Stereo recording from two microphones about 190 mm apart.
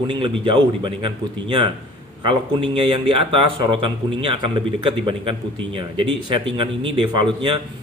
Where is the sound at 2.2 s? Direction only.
25° right (ahead or behind).